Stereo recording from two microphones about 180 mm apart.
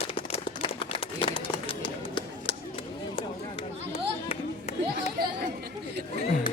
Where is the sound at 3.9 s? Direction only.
35° left (ahead or behind).